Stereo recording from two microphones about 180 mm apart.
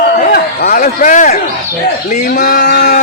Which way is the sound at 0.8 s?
45° left (ahead or behind).